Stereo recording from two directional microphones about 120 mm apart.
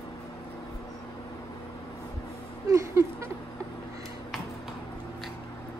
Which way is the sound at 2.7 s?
25° right (ahead or behind).